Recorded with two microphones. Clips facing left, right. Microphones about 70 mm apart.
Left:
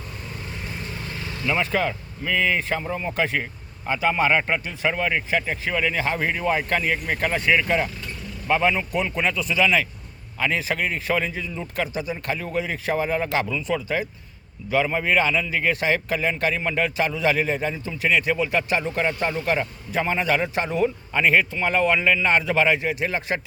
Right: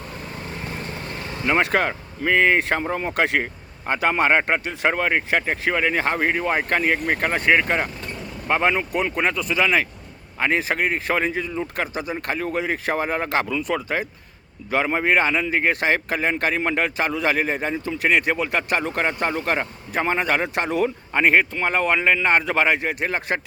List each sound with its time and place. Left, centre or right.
0.8 s vehicle: right
1.6 s a man's voice: right
2.8 s a man's voice: right
3.2 s speech: right
3.4 s a man's voice: right
4.9 s a man's voice: right
21.1 s speech: right